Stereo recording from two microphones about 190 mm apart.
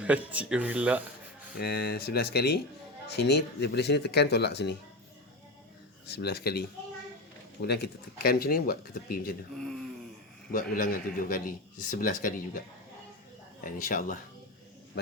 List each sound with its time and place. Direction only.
0.0 s speech: 5° right (ahead or behind)
1.5 s speech: 55° left (ahead or behind)
6.1 s a man's voice: 60° left (ahead or behind)
9.6 s speech: centre (ahead or behind)
10.5 s a man's voice: 45° left (ahead or behind)
13.7 s a man's voice: 45° left (ahead or behind)
15.0 s speech: 60° left (ahead or behind)